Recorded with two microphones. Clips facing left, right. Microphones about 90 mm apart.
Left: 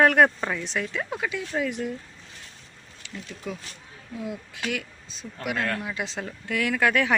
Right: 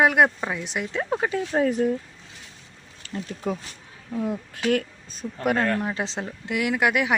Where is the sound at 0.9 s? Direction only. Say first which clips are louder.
Right 5 dB; 30° right (ahead or behind).